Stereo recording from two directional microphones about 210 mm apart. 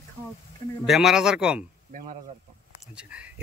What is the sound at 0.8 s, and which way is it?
Speech, centre (ahead or behind).